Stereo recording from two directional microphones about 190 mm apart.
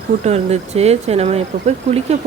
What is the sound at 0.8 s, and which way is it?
Speech, 35° right (ahead or behind).